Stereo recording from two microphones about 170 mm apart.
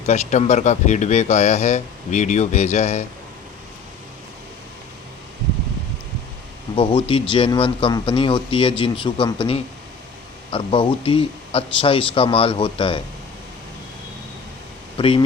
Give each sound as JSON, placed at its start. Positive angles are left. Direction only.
{"t": 0.0, "sound": "speech", "side_deg": 40}
{"t": 6.7, "sound": "speech", "side_deg": 30}
{"t": 14.9, "sound": "speech", "side_deg": 30}